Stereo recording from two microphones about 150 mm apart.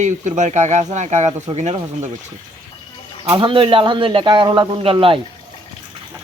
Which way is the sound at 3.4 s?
35° right (ahead or behind).